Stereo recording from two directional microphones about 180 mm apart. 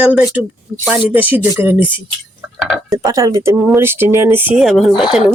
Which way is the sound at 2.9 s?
20° right (ahead or behind).